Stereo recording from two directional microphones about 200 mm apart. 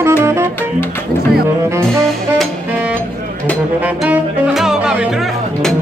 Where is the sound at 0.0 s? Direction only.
10° right (ahead or behind).